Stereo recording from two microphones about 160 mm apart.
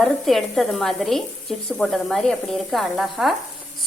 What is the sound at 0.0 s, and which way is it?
Speech, centre (ahead or behind).